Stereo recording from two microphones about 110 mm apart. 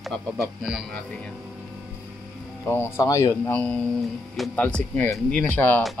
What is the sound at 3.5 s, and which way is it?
Speech, 10° left (ahead or behind).